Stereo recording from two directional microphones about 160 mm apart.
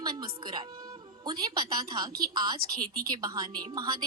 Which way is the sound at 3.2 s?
25° right (ahead or behind).